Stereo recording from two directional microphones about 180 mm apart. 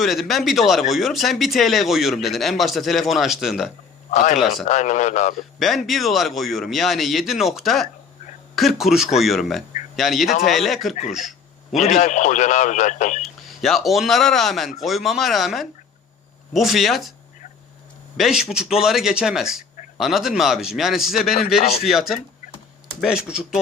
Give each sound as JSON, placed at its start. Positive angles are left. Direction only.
{"t": 0.0, "sound": "speech", "side_deg": 0}
{"t": 4.1, "sound": "a man's voice", "side_deg": 40}
{"t": 5.5, "sound": "speech", "side_deg": 0}
{"t": 11.1, "sound": "a sound", "side_deg": 0}
{"t": 11.8, "sound": "speech", "side_deg": 45}
{"t": 13.2, "sound": "speech", "side_deg": 0}
{"t": 18.2, "sound": "speech", "side_deg": 0}